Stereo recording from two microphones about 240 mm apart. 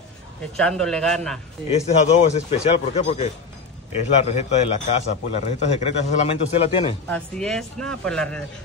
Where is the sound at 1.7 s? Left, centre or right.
Left.